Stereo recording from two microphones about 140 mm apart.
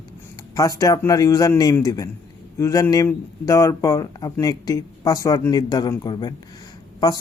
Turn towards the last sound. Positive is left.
turn(degrees=30)  # may be behind; listen again after turning